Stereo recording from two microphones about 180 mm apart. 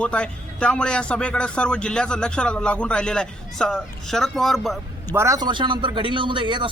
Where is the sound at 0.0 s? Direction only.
5° left (ahead or behind).